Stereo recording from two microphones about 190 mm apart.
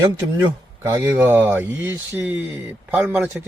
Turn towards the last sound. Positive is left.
turn(degrees=-5)  # may be behind; listen again after turning